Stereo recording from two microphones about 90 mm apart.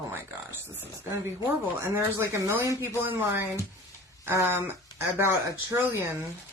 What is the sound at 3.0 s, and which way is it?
Speech, 20° right (ahead or behind).